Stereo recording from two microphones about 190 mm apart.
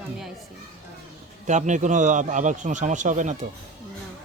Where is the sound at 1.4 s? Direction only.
40° right (ahead or behind).